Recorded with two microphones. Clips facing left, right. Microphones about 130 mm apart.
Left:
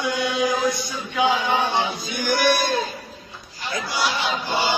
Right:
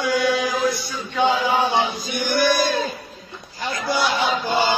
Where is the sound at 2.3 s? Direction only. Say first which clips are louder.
Right 1 dB; 90° left.